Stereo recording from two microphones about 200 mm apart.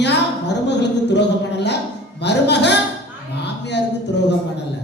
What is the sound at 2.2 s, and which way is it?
Speech, 60° left (ahead or behind).